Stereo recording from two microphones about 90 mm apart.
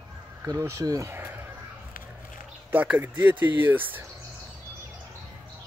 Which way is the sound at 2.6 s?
15° right (ahead or behind).